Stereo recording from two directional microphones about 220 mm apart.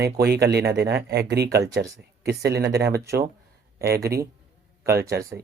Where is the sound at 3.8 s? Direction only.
45° right (ahead or behind).